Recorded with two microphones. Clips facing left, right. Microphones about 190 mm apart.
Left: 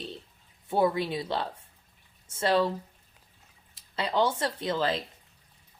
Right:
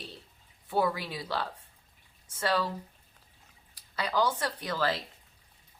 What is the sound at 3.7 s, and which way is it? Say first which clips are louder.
Speech: left 2 dB; 25° left (ahead or behind).